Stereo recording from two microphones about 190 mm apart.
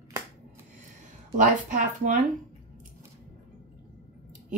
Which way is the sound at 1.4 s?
40° right (ahead or behind).